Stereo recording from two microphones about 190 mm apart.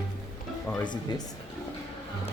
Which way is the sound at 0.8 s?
20° left (ahead or behind).